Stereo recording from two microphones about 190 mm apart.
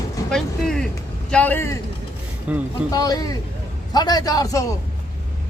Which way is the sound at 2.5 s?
5° right (ahead or behind).